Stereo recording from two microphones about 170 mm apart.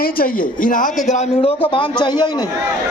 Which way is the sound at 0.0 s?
55° left (ahead or behind).